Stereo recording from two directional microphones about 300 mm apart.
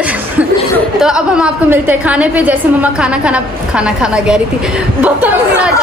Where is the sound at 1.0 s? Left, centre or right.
Centre.